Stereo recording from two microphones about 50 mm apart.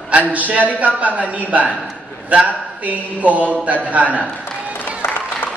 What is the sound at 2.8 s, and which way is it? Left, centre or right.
A woman's voice, right.